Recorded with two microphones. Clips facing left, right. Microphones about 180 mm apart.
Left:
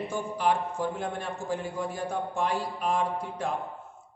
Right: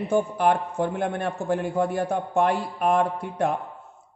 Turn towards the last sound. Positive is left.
turn(degrees=-60)  # may be behind; listen again after turning